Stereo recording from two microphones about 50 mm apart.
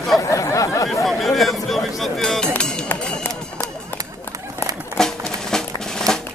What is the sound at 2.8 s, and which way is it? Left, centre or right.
Run, left.